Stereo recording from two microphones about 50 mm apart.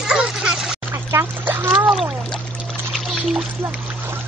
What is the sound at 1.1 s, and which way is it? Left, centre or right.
Splash, right.